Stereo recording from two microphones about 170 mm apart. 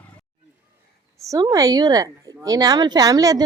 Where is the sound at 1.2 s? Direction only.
20° right (ahead or behind).